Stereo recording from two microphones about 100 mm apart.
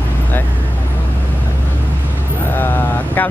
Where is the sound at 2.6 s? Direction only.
20° left (ahead or behind).